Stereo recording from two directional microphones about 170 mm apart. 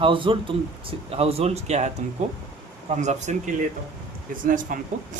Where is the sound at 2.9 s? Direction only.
45° right (ahead or behind).